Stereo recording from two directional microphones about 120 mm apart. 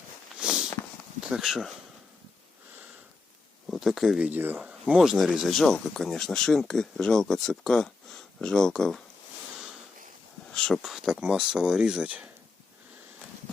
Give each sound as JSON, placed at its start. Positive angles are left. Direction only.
{"t": 0.3, "sound": "walk", "side_deg": -5}
{"t": 1.2, "sound": "speech", "side_deg": -5}
{"t": 3.7, "sound": "speech", "side_deg": 0}
{"t": 4.3, "sound": "speech", "side_deg": -15}
{"t": 10.5, "sound": "speech", "side_deg": 5}